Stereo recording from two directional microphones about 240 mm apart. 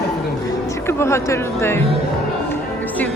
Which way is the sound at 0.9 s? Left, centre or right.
Centre.